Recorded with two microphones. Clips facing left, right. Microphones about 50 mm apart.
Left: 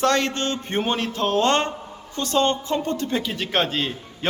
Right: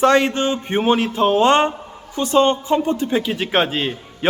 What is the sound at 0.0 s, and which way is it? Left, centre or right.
A man's voice, centre.